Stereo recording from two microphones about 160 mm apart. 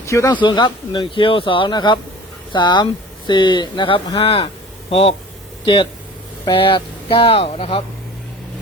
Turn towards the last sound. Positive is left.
turn(degrees=35)  # may be behind; listen again after turning